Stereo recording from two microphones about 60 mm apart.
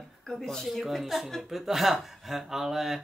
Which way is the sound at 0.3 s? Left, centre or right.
Centre.